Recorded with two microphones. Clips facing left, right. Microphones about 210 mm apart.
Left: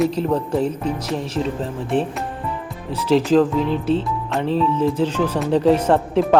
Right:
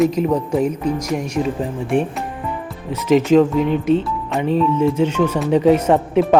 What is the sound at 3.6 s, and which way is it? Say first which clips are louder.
Speech: right 3 dB; 30° left (ahead or behind).